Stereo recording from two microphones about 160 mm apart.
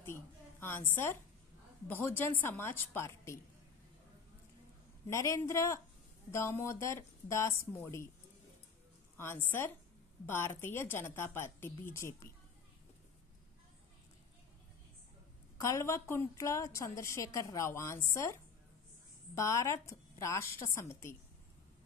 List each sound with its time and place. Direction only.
0.0 s a woman's voice: 15° left (ahead or behind)
5.0 s a woman's voice: 20° left (ahead or behind)
9.1 s a woman's voice: 15° left (ahead or behind)
15.5 s a woman's voice: 20° left (ahead or behind)